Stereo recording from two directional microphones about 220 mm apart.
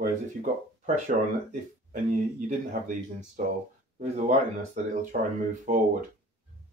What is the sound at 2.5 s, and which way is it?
Speech, 35° right (ahead or behind).